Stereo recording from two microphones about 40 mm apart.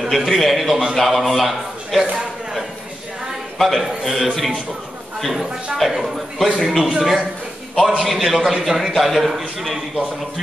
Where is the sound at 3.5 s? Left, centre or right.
Centre.